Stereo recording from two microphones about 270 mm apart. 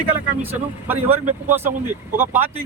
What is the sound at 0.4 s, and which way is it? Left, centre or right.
Speech, centre.